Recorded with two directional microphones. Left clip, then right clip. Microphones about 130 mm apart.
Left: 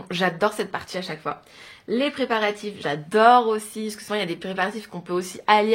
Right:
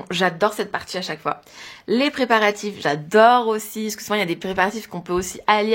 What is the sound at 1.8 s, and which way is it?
Speech, 65° right (ahead or behind).